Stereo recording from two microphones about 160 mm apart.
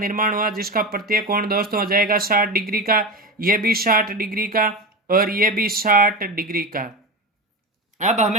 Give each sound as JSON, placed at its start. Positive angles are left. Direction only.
{"t": 0.0, "sound": "speech", "side_deg": -60}
{"t": 7.9, "sound": "a man's voice", "side_deg": -50}